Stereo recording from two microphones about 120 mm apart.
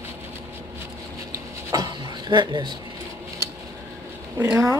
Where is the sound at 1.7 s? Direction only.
35° right (ahead or behind).